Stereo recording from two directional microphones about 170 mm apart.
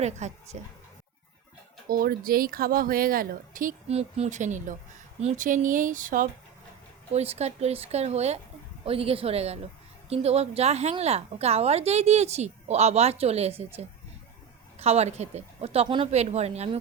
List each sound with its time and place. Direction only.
0.0 s speech: 40° right (ahead or behind)
1.9 s speech: 55° right (ahead or behind)
7.1 s a woman's voice: 40° right (ahead or behind)
14.8 s a woman's voice: 40° right (ahead or behind)